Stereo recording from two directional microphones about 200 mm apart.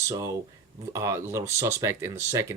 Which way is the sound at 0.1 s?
15° right (ahead or behind).